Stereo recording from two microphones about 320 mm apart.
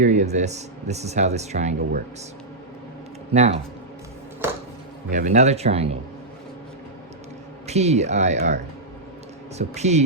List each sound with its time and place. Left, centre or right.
0.0 s speech: right
3.3 s speech: centre
5.1 s speech: right
7.7 s speech: centre